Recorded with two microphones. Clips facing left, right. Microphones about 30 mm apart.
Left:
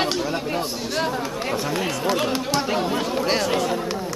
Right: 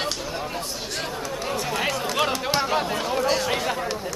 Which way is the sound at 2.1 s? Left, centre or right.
Centre.